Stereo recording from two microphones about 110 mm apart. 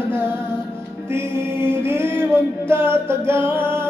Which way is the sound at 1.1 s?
25° right (ahead or behind).